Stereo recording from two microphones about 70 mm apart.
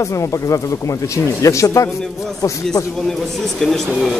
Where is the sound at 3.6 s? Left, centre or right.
Centre.